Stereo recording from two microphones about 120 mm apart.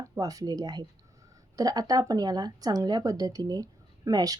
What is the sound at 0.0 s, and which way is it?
Speech, 30° right (ahead or behind).